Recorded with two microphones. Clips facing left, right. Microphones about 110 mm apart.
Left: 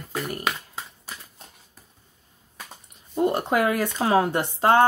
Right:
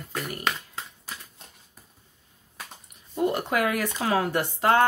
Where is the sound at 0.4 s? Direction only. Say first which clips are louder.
Left 1 dB; 5° left (ahead or behind).